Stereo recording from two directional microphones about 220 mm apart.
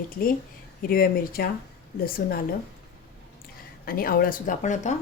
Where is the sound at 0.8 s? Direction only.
40° left (ahead or behind).